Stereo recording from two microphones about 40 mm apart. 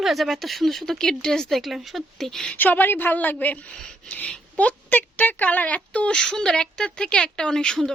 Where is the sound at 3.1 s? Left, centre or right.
Left.